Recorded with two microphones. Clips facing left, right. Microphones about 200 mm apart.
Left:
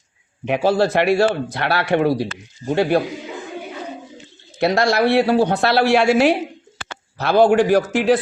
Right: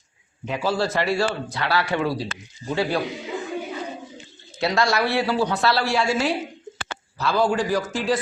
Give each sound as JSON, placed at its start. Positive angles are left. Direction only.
{"t": 0.4, "sound": "a woman's voice", "side_deg": 65}
{"t": 4.6, "sound": "a woman's voice", "side_deg": 55}